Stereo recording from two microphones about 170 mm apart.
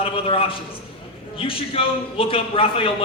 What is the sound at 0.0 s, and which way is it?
A man's voice, 35° left (ahead or behind).